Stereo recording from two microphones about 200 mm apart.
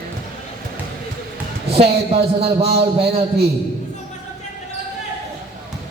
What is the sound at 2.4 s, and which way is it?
Speech, 30° right (ahead or behind).